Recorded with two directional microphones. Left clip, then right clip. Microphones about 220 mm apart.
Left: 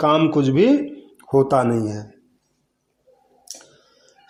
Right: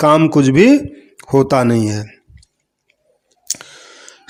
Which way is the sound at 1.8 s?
90° right.